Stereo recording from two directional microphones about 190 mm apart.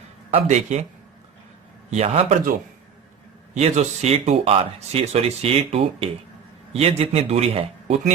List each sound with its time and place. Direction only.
0.3 s speech: 35° right (ahead or behind)
1.9 s speech: 35° right (ahead or behind)
3.5 s speech: 35° right (ahead or behind)